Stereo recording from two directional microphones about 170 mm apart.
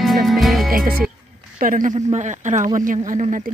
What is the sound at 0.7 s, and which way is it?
Speech, 60° right (ahead or behind).